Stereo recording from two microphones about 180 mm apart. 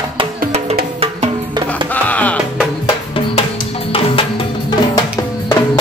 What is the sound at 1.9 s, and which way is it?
Music, 10° left (ahead or behind).